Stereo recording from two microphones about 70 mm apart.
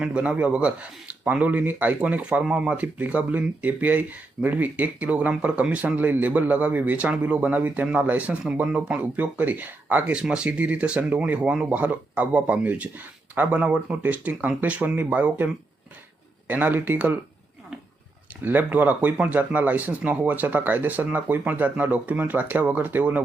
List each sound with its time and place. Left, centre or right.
0.0 s speech: centre
16.5 s speech: right
18.4 s speech: right